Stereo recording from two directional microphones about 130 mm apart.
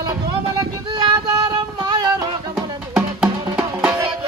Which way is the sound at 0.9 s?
30° right (ahead or behind).